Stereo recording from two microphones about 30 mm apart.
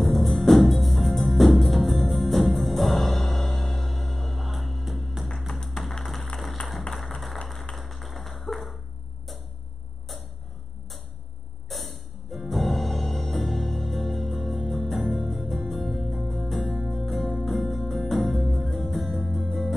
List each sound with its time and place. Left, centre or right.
0.0 s music: centre
5.8 s music: centre
6.6 s music: left
7.7 s tap: centre
11.7 s music: centre